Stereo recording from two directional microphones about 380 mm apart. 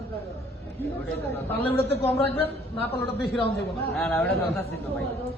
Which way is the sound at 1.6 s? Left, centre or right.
Centre.